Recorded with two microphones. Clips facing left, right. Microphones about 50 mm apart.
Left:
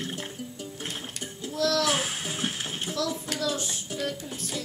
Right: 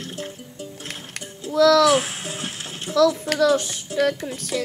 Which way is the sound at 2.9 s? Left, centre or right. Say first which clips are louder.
Right 14 dB; right.